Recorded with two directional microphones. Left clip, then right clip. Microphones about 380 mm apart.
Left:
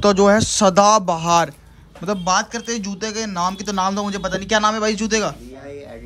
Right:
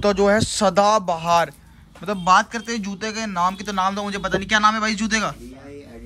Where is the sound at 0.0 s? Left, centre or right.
Centre.